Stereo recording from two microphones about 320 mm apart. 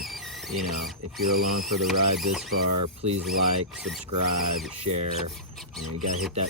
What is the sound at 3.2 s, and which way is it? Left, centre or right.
Speech, centre.